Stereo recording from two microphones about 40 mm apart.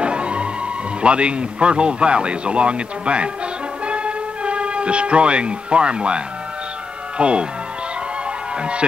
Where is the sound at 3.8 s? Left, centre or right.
Right.